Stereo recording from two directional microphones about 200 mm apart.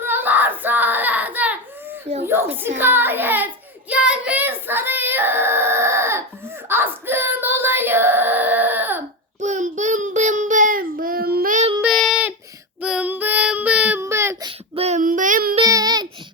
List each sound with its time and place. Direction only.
0.0 s child singing: 10° right (ahead or behind)
2.1 s speech: 30° right (ahead or behind)
2.7 s child singing: 10° right (ahead or behind)
9.4 s child singing: 40° right (ahead or behind)
11.8 s child singing: centre (ahead or behind)
14.8 s child singing: 35° right (ahead or behind)
15.5 s child singing: 20° right (ahead or behind)